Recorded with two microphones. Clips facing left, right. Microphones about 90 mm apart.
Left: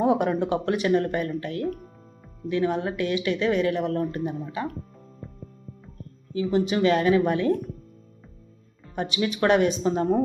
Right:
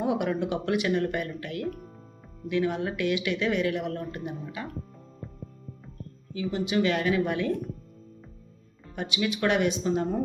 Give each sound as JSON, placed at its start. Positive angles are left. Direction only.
{"t": 0.0, "sound": "speech", "side_deg": 35}
{"t": 6.3, "sound": "speech", "side_deg": 35}
{"t": 9.0, "sound": "speech", "side_deg": 40}